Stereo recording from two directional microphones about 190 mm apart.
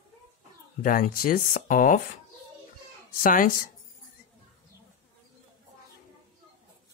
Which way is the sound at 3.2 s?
45° left (ahead or behind).